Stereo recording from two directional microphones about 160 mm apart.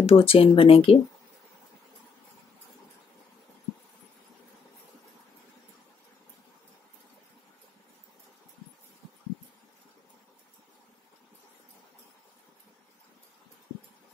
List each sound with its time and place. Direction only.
0.0 s speech: 35° left (ahead or behind)